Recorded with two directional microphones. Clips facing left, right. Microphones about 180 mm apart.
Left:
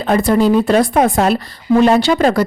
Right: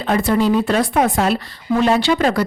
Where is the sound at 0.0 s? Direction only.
40° left (ahead or behind).